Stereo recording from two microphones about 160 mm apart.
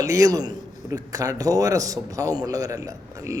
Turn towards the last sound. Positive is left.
turn(degrees=-20)  # may be behind; listen again after turning